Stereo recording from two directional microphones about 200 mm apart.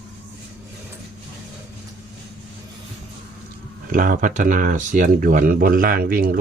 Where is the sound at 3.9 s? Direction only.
45° right (ahead or behind).